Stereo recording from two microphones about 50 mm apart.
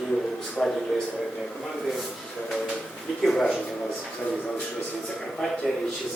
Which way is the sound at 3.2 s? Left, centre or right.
Centre.